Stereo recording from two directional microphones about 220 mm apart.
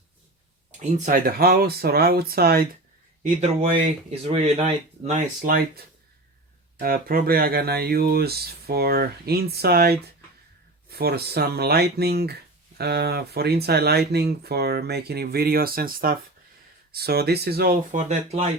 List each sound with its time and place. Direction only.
0.8 s speech: 35° right (ahead or behind)
3.2 s speech: 30° right (ahead or behind)